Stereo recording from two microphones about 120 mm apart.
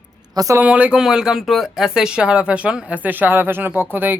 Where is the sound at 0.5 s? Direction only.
10° right (ahead or behind).